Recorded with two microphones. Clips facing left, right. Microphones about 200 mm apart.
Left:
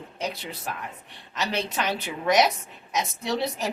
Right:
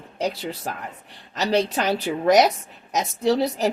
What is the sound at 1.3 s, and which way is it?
Speech, 35° right (ahead or behind).